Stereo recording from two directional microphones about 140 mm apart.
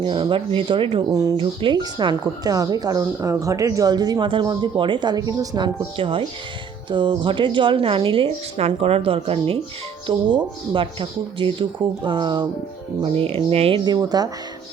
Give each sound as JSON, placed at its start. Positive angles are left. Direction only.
{"t": 0.0, "sound": "a woman's voice", "side_deg": -35}
{"t": 13.8, "sound": "speech", "side_deg": -30}